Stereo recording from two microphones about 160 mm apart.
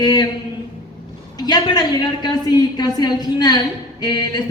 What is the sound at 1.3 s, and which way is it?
A woman's voice, 25° left (ahead or behind).